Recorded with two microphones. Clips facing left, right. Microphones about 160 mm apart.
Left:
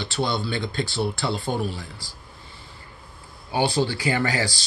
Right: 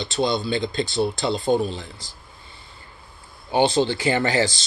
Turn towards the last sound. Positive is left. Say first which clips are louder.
# right 4 dB
turn(degrees=-25)  # may be behind; listen again after turning